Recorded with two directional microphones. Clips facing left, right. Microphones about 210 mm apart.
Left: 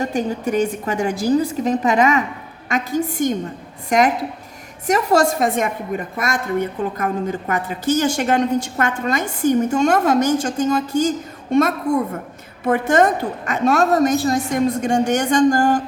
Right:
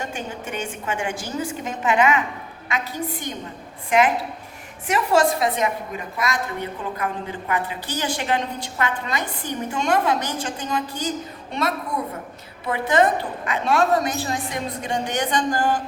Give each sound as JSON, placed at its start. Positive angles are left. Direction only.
{"t": 0.0, "sound": "a woman's voice", "side_deg": 35}